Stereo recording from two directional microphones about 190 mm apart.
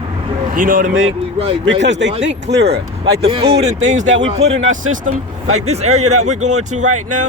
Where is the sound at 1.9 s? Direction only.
65° right (ahead or behind).